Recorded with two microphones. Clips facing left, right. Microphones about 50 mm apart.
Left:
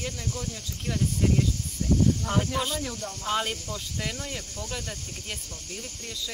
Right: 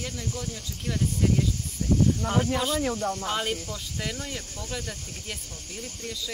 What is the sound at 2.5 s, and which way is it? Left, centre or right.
Speech, centre.